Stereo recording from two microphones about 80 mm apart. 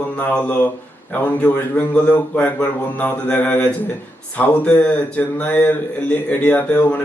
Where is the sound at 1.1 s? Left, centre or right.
Left.